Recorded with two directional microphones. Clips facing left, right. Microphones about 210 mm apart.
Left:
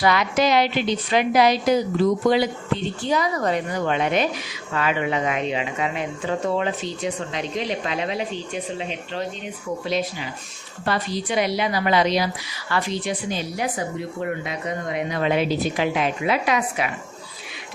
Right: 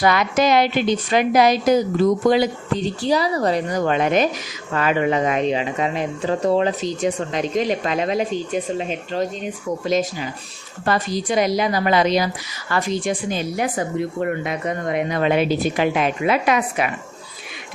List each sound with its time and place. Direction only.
0.0 s a woman's voice: 45° right (ahead or behind)
9.8 s a woman's voice: 45° right (ahead or behind)